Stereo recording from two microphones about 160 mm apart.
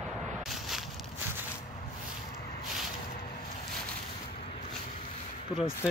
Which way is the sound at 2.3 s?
80° left.